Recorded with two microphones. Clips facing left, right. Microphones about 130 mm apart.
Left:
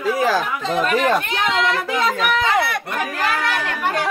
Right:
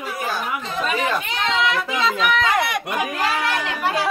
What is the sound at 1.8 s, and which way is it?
Speech, 45° left (ahead or behind).